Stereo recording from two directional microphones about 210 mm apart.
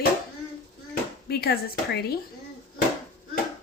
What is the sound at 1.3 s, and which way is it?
Speech, 50° left (ahead or behind).